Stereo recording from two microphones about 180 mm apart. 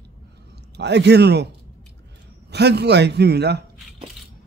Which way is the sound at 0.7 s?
70° right (ahead or behind).